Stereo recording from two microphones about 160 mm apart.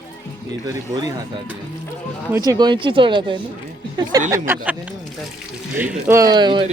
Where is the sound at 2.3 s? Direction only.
25° right (ahead or behind).